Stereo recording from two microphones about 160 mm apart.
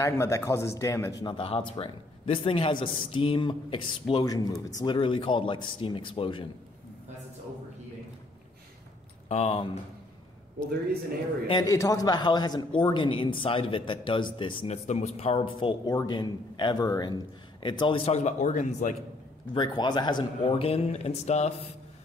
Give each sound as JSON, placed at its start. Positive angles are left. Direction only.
{"t": 0.0, "sound": "a man's voice", "side_deg": 15}
{"t": 4.9, "sound": "a man's voice", "side_deg": 35}
{"t": 9.3, "sound": "a man's voice", "side_deg": 40}
{"t": 11.4, "sound": "a man's voice", "side_deg": 25}
{"t": 14.9, "sound": "a man's voice", "side_deg": 45}
{"t": 19.5, "sound": "a man's voice", "side_deg": 25}